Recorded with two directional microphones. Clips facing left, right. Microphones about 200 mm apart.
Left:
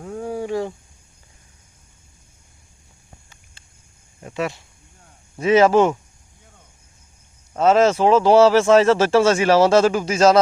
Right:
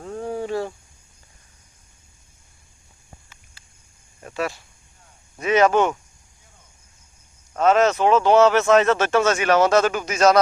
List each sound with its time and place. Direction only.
0.0 s a sound: 10° left (ahead or behind)
4.2 s snake: 20° left (ahead or behind)
5.4 s speech: 30° left (ahead or behind)
7.5 s speech: 25° left (ahead or behind)